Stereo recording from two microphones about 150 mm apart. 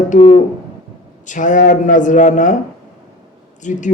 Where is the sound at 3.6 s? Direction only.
55° left (ahead or behind).